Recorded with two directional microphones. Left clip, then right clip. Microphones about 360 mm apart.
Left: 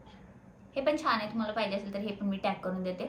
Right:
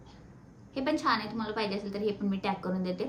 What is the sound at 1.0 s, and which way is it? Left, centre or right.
A woman's voice, centre.